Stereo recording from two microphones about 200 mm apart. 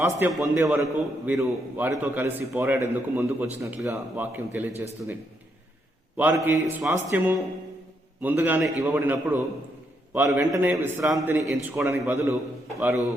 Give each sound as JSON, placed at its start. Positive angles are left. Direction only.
{"t": 0.0, "sound": "a man's voice", "side_deg": -15}